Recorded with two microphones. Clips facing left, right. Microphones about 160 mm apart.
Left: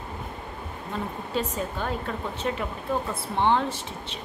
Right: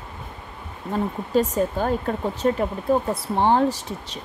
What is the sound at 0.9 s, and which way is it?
Speech, 40° right (ahead or behind).